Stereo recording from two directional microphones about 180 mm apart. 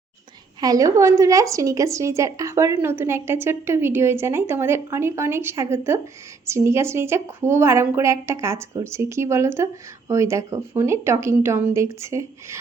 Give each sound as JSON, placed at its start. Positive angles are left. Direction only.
{"t": 0.6, "sound": "a woman's voice", "side_deg": -20}